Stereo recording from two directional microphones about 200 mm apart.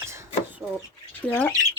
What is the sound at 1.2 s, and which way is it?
Speech, 10° left (ahead or behind).